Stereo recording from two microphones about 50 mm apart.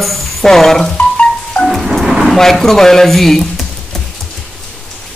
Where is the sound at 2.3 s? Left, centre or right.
Centre.